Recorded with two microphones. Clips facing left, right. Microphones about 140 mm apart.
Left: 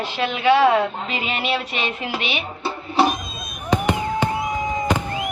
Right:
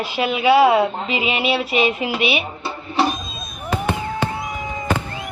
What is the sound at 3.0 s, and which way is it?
Vehicle, 20° left (ahead or behind).